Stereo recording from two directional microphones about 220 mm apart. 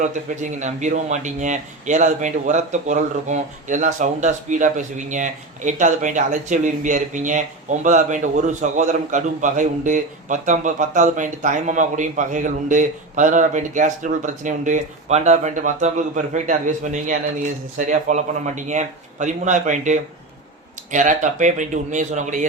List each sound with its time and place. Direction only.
0.0 s speech: 35° right (ahead or behind)